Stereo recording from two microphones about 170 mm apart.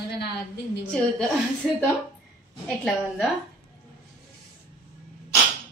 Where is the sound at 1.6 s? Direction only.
Centre (ahead or behind).